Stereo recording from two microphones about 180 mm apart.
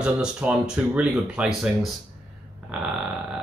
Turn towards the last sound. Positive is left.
turn(degrees=-5)  # may be behind; listen again after turning